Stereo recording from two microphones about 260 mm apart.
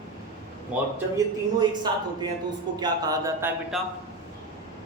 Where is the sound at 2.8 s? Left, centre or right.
Centre.